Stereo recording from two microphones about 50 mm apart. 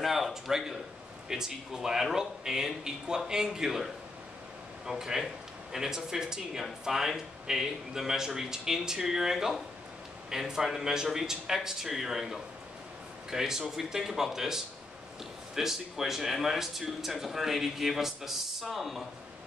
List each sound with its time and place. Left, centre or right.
0.0 s speech: centre